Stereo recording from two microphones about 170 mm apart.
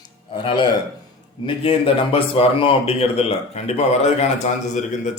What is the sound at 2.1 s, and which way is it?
A man's voice, 35° left (ahead or behind).